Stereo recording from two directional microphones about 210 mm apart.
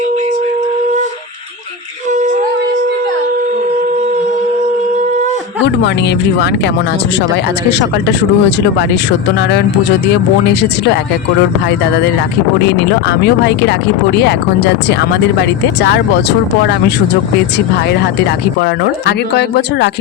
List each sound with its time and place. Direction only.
2.0 s female singing: 35° right (ahead or behind)
5.6 s speech: 55° left (ahead or behind)
7.7 s speech: 55° left (ahead or behind)
10.1 s speech: 55° left (ahead or behind)
12.6 s speech: 55° left (ahead or behind)
17.8 s speech: 50° left (ahead or behind)